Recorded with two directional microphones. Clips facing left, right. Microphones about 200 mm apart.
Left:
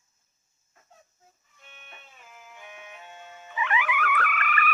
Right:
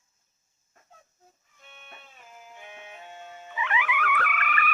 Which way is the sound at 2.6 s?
30° right (ahead or behind).